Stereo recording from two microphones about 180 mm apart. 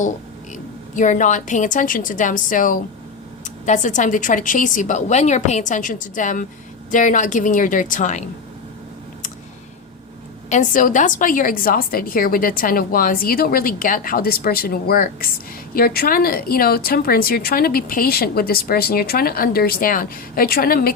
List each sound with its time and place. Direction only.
0.9 s a woman's voice: 45° left (ahead or behind)
10.5 s a woman's voice: 45° left (ahead or behind)